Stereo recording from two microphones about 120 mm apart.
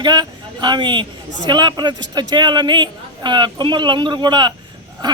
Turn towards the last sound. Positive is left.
turn(degrees=-35)  # may be behind; listen again after turning